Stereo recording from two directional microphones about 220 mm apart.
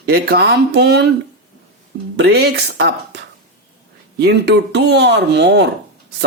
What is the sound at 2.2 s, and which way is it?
Speech, 45° right (ahead or behind).